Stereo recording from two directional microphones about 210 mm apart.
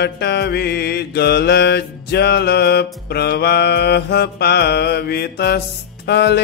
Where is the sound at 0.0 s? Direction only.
50° left (ahead or behind).